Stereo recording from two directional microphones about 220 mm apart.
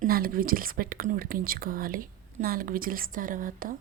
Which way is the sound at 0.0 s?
40° right (ahead or behind).